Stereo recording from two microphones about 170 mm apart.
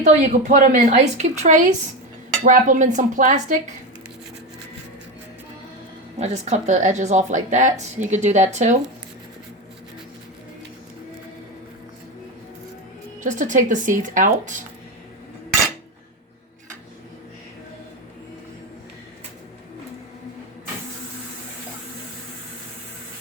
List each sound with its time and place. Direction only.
0.0 s speech: 45° right (ahead or behind)
6.1 s speech: 40° right (ahead or behind)
13.2 s speech: 50° right (ahead or behind)